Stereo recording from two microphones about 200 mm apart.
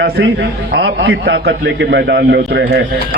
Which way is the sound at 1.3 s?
60° right (ahead or behind).